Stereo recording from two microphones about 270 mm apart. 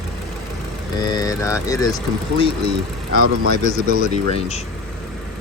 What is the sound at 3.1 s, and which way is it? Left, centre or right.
Speech, right.